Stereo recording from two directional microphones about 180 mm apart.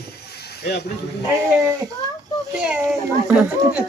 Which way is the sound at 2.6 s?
5° right (ahead or behind).